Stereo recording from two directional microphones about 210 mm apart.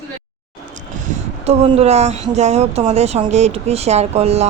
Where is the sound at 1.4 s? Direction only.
30° right (ahead or behind).